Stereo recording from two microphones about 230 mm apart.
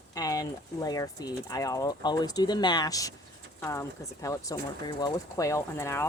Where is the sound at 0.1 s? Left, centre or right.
Centre.